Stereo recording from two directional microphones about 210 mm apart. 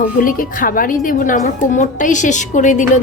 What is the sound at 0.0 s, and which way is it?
A woman's voice, 40° left (ahead or behind).